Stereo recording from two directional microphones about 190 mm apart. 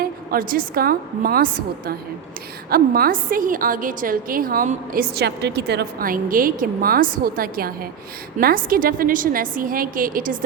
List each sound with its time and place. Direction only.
0.0 s a woman's voice: 50° right (ahead or behind)
2.6 s a woman's voice: 50° right (ahead or behind)